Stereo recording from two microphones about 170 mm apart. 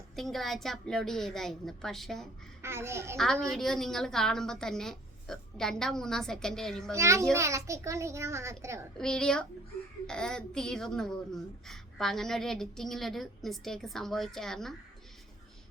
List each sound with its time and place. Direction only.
0.2 s a woman's voice: centre (ahead or behind)
2.6 s a child's voice: 15° right (ahead or behind)
3.2 s a woman's voice: centre (ahead or behind)
6.9 s a child's voice: 15° right (ahead or behind)
9.0 s a woman's voice: 5° left (ahead or behind)